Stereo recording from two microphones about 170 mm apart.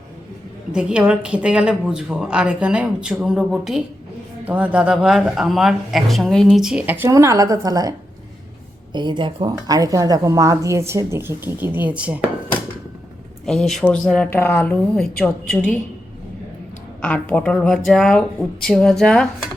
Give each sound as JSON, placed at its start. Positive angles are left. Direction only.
{"t": 0.7, "sound": "a woman's voice", "side_deg": -5}
{"t": 13.4, "sound": "speech", "side_deg": 0}
{"t": 17.0, "sound": "a woman's voice", "side_deg": 10}